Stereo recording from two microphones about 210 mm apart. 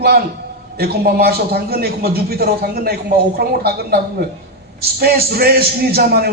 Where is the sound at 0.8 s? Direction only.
45° right (ahead or behind).